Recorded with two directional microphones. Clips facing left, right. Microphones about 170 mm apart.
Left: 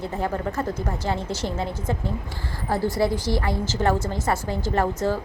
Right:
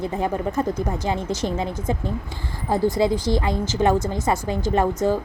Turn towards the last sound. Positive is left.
turn(degrees=-15)  # may be behind; listen again after turning